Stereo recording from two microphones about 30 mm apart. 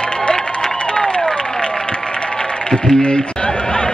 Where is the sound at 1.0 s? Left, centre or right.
Left.